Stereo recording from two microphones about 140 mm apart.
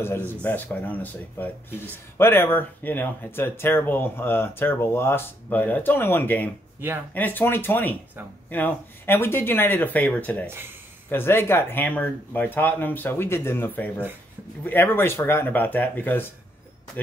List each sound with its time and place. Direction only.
0.0 s speech: 15° left (ahead or behind)